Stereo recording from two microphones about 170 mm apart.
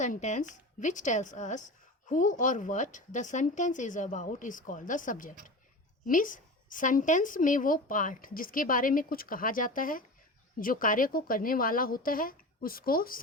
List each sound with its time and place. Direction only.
0.0 s a woman's voice: 45° left (ahead or behind)